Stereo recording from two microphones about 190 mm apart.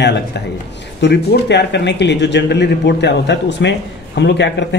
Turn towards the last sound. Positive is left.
turn(degrees=65)  # may be behind; listen again after turning